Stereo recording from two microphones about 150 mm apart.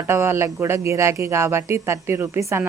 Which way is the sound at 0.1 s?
15° right (ahead or behind).